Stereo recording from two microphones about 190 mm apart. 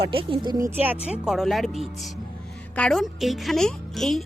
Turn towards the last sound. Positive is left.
turn(degrees=0)  # may be behind; listen again after turning